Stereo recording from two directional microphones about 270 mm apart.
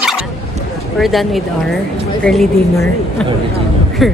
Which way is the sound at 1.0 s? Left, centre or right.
Centre.